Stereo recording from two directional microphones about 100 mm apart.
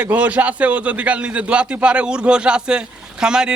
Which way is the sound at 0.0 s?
15° right (ahead or behind).